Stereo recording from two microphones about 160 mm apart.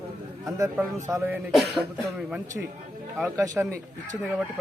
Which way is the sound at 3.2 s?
15° right (ahead or behind).